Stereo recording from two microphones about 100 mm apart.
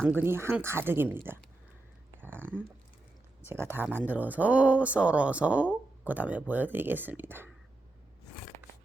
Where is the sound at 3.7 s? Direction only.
20° right (ahead or behind).